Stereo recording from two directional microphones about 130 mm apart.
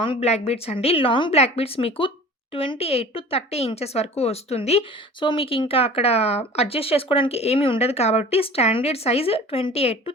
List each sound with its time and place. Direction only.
0.0 s a woman's voice: 45° left (ahead or behind)
5.2 s a woman's voice: 40° left (ahead or behind)